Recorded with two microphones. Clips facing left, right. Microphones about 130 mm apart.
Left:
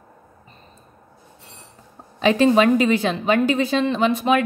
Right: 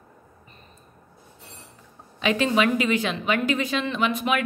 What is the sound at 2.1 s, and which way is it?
Speech, 35° left (ahead or behind).